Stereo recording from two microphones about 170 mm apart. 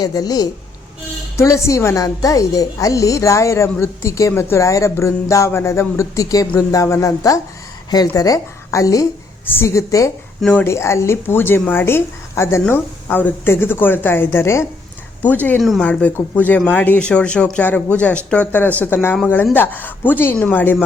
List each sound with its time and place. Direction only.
0.0 s a woman's voice: 20° left (ahead or behind)